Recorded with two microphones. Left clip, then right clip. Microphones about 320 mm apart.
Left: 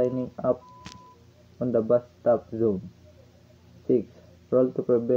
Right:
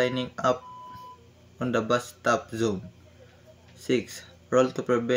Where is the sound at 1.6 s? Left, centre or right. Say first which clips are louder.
Left 3 dB; right.